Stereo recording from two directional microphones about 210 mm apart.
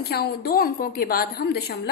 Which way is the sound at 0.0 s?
50° left (ahead or behind).